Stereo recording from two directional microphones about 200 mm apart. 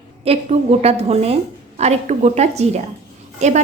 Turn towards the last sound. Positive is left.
turn(degrees=-35)  # may be behind; listen again after turning